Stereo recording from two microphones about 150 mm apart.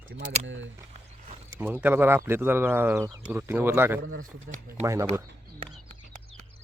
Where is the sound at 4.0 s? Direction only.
75° right (ahead or behind).